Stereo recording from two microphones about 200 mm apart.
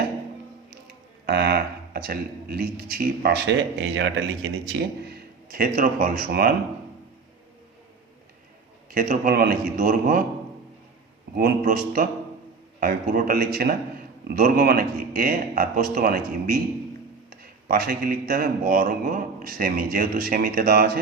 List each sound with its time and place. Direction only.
1.3 s speech: 55° right (ahead or behind)
8.9 s speech: 45° right (ahead or behind)
11.3 s speech: 45° right (ahead or behind)